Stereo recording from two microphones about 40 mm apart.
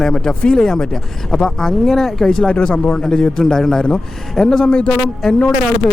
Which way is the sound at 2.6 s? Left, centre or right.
Left.